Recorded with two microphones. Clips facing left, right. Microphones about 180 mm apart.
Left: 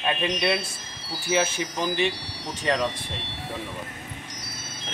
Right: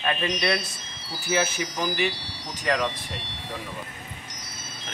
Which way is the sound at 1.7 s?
25° left (ahead or behind).